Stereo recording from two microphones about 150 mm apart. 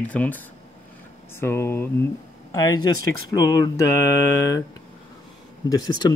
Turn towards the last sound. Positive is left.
turn(degrees=30)  # may be behind; listen again after turning